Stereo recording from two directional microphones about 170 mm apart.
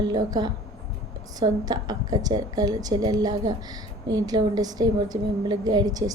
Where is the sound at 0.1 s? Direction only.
20° right (ahead or behind).